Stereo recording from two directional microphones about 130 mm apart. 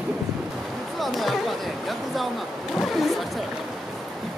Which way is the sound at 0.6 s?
Centre (ahead or behind).